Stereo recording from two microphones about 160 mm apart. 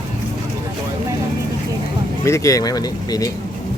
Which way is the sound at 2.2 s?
20° left (ahead or behind).